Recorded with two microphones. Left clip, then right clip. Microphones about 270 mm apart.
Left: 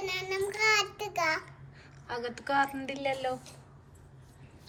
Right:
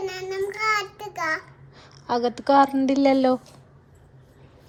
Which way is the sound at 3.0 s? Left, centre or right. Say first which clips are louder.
Right 12 dB; right.